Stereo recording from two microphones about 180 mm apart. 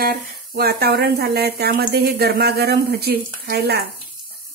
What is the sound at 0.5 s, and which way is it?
Speech, 60° right (ahead or behind).